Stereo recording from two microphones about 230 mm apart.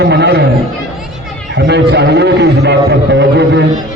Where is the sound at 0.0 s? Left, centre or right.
Right.